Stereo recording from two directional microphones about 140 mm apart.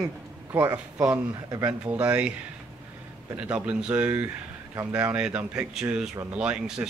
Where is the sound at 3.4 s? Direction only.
10° right (ahead or behind).